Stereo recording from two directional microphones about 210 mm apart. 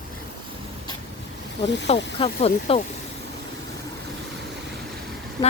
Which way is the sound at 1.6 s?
55° left (ahead or behind).